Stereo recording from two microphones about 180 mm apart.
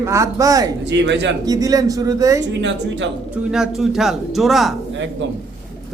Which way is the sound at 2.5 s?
85° right.